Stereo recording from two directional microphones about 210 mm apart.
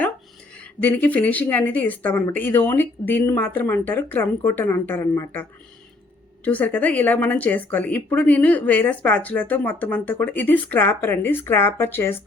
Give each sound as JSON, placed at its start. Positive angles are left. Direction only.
{"t": 0.5, "sound": "speech", "side_deg": 5}